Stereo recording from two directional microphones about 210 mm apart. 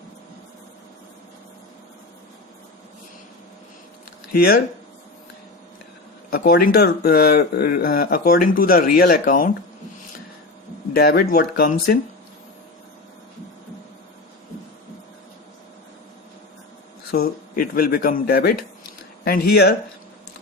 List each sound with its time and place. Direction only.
4.3 s speech: 45° left (ahead or behind)
6.3 s speech: 50° left (ahead or behind)
10.9 s speech: 45° left (ahead or behind)
17.1 s speech: 45° left (ahead or behind)